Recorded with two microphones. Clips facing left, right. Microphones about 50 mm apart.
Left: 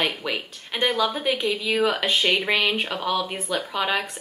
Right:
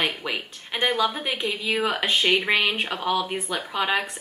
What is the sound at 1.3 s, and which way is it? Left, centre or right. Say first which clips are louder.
Speech: left 2 dB; centre.